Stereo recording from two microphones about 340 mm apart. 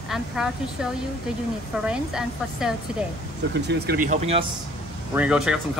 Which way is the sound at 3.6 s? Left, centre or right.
Right.